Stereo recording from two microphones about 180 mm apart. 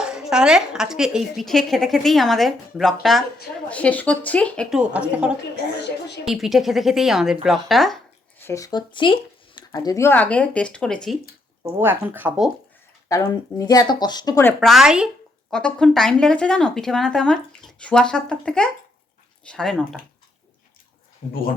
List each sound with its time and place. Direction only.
0.0 s speech: 5° right (ahead or behind)
4.8 s speech: 5° right (ahead or behind)
8.4 s speech: 15° left (ahead or behind)
11.8 s speech: 10° right (ahead or behind)
13.1 s speech: 20° left (ahead or behind)
14.6 s speech: centre (ahead or behind)